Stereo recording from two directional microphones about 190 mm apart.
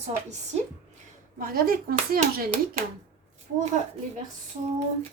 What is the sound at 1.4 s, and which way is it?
Speech, 50° right (ahead or behind).